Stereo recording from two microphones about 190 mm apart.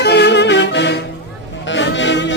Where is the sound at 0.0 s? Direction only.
60° left (ahead or behind).